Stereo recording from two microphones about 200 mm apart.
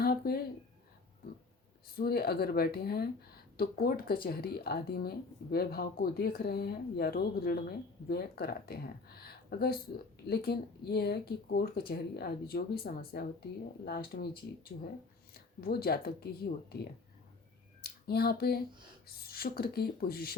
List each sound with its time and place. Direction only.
0.0 s a sound: 50° left (ahead or behind)
2.0 s speech: 50° left (ahead or behind)
18.0 s speech: 50° left (ahead or behind)